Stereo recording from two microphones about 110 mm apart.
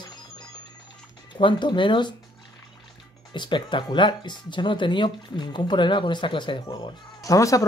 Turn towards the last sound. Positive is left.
turn(degrees=30)  # may be behind; listen again after turning